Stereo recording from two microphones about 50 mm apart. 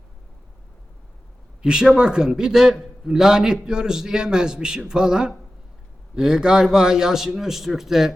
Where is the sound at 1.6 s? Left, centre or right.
Centre.